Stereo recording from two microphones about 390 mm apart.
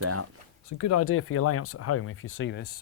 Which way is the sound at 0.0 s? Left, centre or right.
Right.